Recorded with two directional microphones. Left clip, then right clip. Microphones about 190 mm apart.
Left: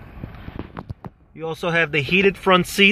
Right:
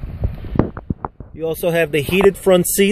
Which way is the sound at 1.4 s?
30° right (ahead or behind).